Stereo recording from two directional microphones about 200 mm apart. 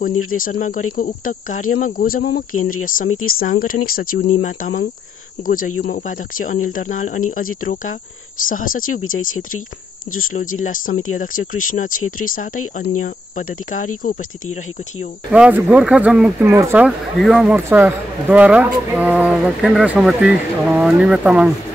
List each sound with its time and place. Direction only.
0.3 s speech: 40° left (ahead or behind)
2.5 s speech: 90° left
2.8 s speech: 40° left (ahead or behind)
8.5 s speech: 45° left (ahead or behind)
15.3 s speech: 5° right (ahead or behind)